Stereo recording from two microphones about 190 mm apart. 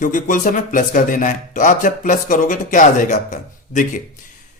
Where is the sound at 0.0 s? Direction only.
45° left (ahead or behind).